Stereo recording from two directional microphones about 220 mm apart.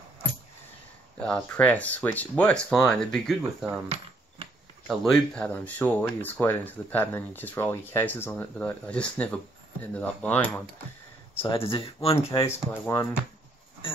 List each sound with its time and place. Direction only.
1.2 s speech: 5° left (ahead or behind)
3.6 s cutlery: 25° right (ahead or behind)
4.8 s speech: centre (ahead or behind)
11.4 s speech: 25° left (ahead or behind)
12.3 s speech: 10° left (ahead or behind)